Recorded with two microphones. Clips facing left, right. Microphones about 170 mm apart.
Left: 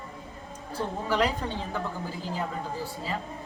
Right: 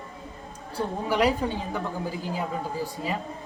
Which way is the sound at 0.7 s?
10° right (ahead or behind).